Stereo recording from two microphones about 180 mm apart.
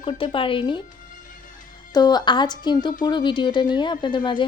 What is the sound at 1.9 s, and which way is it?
Speech, 25° left (ahead or behind).